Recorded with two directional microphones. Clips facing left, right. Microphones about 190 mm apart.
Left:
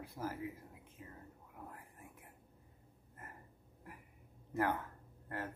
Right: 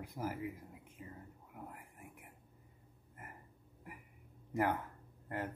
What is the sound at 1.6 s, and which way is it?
Whispering, 15° right (ahead or behind).